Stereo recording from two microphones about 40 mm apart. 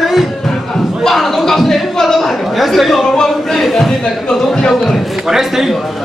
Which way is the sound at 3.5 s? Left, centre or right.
Centre.